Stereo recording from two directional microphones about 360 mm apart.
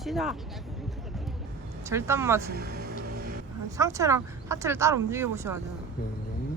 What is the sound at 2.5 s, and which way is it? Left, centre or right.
Speech, right.